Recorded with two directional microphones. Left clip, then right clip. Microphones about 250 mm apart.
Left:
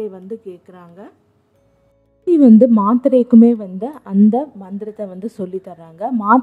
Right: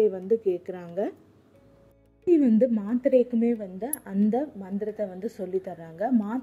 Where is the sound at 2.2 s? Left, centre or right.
Centre.